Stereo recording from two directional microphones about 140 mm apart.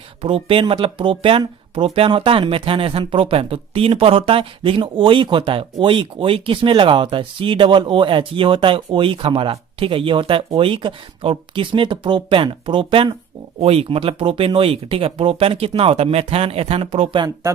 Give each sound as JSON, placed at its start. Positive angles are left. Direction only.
{"t": 0.2, "sound": "speech", "side_deg": -40}